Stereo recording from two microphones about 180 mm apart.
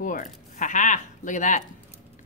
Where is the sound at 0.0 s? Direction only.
45° left (ahead or behind).